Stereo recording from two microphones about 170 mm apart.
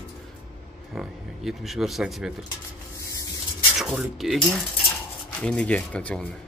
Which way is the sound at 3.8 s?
Centre (ahead or behind).